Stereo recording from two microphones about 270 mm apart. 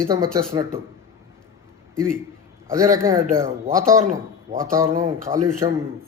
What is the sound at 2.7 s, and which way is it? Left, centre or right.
A man's voice, centre.